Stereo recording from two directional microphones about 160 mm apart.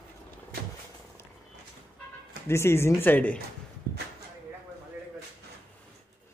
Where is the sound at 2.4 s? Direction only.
15° left (ahead or behind).